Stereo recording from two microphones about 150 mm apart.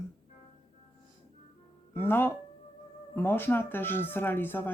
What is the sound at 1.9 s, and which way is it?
Speech, 15° left (ahead or behind).